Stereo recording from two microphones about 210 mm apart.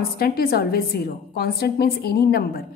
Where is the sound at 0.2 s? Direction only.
45° left (ahead or behind).